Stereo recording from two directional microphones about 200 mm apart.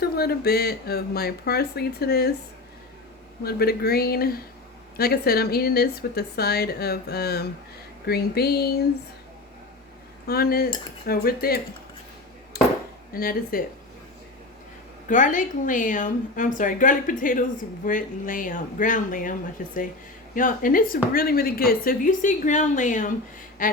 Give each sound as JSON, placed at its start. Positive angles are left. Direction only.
{"t": 0.0, "sound": "speech", "side_deg": 50}
{"t": 3.4, "sound": "speech", "side_deg": 50}
{"t": 10.2, "sound": "speech", "side_deg": 50}
{"t": 12.5, "sound": "a sound", "side_deg": 50}
{"t": 13.1, "sound": "speech", "side_deg": 45}
{"t": 15.0, "sound": "a woman's voice", "side_deg": 40}